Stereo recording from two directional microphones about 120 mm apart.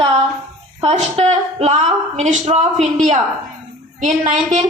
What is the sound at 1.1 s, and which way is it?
A woman's voice, 55° right (ahead or behind).